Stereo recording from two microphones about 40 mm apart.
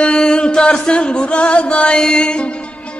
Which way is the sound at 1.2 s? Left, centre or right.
Left.